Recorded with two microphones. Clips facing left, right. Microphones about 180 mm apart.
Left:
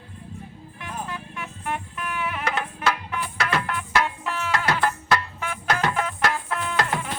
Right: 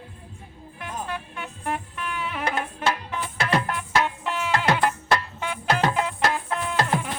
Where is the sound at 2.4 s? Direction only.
30° right (ahead or behind).